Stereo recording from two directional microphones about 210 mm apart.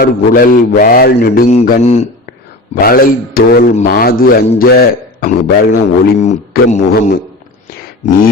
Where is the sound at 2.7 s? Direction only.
45° left (ahead or behind).